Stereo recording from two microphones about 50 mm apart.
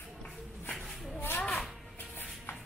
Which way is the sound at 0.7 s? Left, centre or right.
Centre.